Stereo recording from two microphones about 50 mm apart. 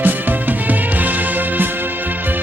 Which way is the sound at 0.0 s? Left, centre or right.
Right.